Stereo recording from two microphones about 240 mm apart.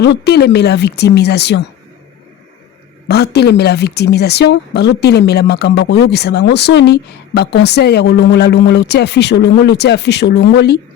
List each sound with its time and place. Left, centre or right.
0.0 s speech: left
3.1 s speech: left